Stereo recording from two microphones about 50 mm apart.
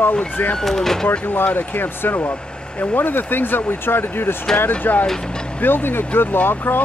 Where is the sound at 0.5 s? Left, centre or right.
Centre.